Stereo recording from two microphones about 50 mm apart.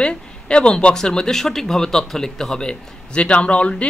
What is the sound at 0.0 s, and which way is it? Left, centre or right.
A man's voice, centre.